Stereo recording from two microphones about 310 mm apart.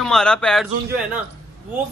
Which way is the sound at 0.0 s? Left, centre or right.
Centre.